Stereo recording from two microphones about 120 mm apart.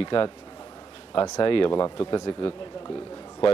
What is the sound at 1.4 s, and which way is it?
Speech, 40° left (ahead or behind).